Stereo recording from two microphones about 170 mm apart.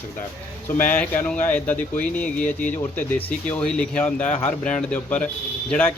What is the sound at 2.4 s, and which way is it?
Speech, 50° left (ahead or behind).